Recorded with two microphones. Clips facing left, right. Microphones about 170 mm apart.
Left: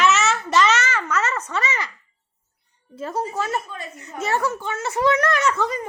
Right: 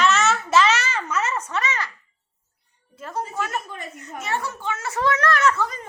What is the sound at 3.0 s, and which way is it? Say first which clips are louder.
A woman's voice: left 3 dB; 30° left (ahead or behind).